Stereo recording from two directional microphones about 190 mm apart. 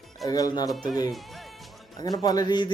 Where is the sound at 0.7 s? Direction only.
Centre (ahead or behind).